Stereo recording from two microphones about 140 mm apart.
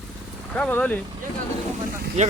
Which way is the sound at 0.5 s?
10° left (ahead or behind).